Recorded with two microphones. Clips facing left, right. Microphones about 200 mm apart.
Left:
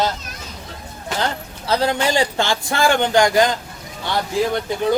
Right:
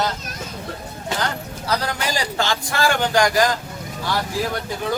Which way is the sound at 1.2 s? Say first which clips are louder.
Left 5 dB; 25° left (ahead or behind).